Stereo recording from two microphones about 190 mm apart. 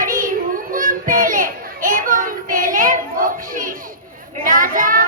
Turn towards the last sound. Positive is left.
turn(degrees=-45)  # may be behind; listen again after turning